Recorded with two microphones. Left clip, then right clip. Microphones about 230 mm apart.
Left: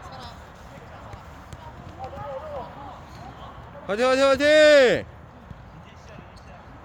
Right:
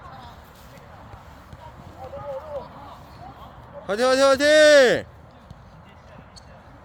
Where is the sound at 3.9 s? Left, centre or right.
Right.